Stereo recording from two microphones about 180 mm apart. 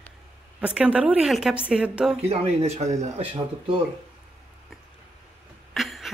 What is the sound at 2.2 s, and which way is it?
Speech, 40° right (ahead or behind).